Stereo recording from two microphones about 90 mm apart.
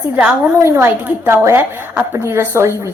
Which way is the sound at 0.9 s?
20° right (ahead or behind).